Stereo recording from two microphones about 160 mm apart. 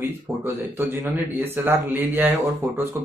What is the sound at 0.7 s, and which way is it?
Speech, 15° right (ahead or behind).